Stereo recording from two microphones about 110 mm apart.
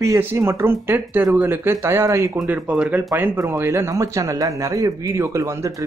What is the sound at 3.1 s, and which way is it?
Speech, 25° right (ahead or behind).